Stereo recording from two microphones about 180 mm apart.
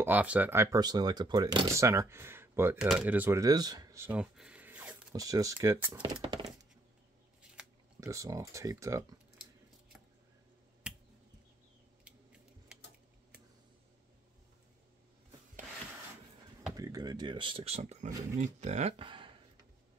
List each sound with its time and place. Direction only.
0.0 s speech: 10° right (ahead or behind)
5.1 s speech: 20° right (ahead or behind)
6.2 s a sound: 25° right (ahead or behind)
8.0 s speech: 15° right (ahead or behind)
12.0 s a sound: 5° right (ahead or behind)
16.7 s speech: 20° right (ahead or behind)